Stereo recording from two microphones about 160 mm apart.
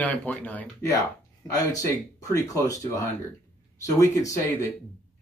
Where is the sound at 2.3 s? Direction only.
20° left (ahead or behind).